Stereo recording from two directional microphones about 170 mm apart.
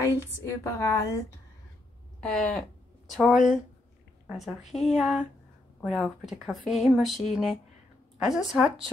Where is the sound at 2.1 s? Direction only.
5° left (ahead or behind).